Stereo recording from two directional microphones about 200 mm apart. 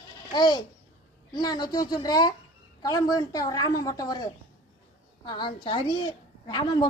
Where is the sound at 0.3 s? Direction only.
20° left (ahead or behind).